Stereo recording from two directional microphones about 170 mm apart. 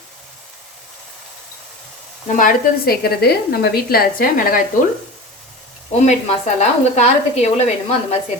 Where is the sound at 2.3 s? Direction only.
50° left (ahead or behind).